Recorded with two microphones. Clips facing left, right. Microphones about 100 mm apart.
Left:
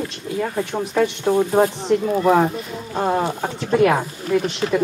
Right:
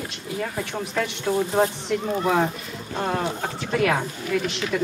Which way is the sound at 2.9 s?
20° left (ahead or behind).